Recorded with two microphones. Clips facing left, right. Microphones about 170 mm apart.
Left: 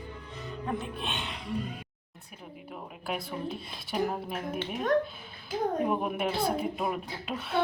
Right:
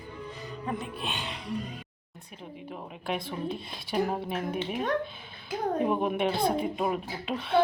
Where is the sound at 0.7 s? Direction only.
Centre (ahead or behind).